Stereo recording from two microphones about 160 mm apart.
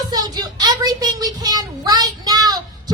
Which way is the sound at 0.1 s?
25° right (ahead or behind).